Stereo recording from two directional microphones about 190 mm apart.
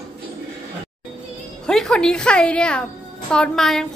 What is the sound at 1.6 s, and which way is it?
A woman's voice, 5° left (ahead or behind).